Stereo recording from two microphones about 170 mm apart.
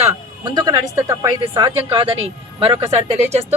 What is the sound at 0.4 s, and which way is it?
A woman's voice, 25° right (ahead or behind).